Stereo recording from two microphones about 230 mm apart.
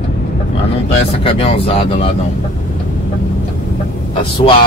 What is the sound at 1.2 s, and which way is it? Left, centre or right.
Speech, left.